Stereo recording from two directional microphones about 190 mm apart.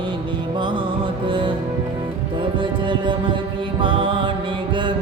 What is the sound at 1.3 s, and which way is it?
Music, 25° right (ahead or behind).